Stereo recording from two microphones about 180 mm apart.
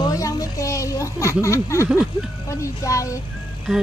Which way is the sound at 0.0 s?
20° left (ahead or behind).